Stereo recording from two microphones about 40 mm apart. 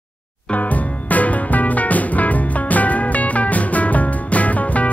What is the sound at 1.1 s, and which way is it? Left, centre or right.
Music, left.